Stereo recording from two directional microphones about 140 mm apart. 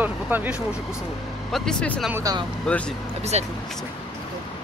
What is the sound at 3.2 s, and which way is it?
Speech, 50° right (ahead or behind).